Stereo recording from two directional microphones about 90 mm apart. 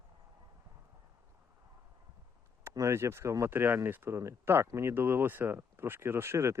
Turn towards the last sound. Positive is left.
turn(degrees=-30)  # may be behind; listen again after turning